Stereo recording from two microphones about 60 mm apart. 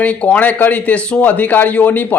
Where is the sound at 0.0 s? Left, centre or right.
Left.